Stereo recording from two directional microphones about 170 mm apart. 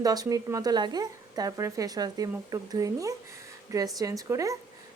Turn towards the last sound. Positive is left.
turn(degrees=-20)  # may be behind; listen again after turning